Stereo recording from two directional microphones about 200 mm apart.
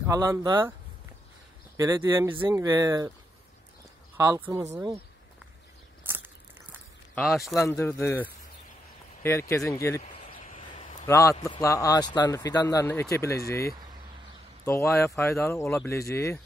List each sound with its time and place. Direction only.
0.0 s speech: 15° right (ahead or behind)
1.8 s speech: 10° right (ahead or behind)
4.2 s speech: 15° right (ahead or behind)
6.0 s a sound: 10° right (ahead or behind)
7.2 s speech: centre (ahead or behind)
7.6 s speech: 15° left (ahead or behind)
10.1 s a sound: 30° left (ahead or behind)
11.1 s speech: 15° left (ahead or behind)